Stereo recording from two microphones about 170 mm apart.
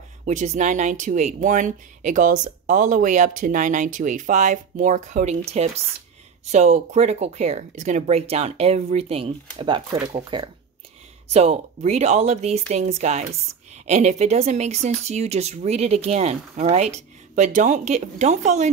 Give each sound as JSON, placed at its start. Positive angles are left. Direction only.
{"t": 0.2, "sound": "speech", "side_deg": -45}
{"t": 11.3, "sound": "speech", "side_deg": -40}